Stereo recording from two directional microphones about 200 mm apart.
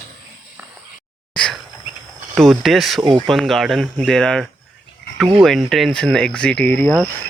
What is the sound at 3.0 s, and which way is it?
Speech, 25° right (ahead or behind).